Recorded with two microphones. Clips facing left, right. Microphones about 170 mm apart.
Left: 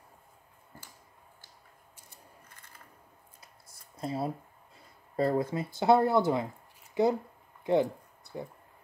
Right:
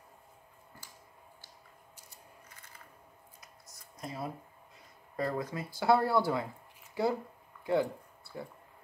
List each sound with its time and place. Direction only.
3.3 s scissors: 30° left (ahead or behind)
5.1 s speech: 30° left (ahead or behind)
7.6 s a sound: 20° left (ahead or behind)